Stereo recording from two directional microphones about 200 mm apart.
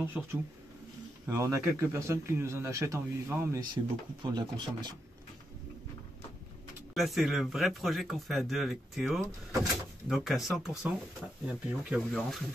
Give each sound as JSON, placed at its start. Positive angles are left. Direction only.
{"t": 0.2, "sound": "speech", "side_deg": -5}
{"t": 1.2, "sound": "speech", "side_deg": -15}
{"t": 6.9, "sound": "speech", "side_deg": 0}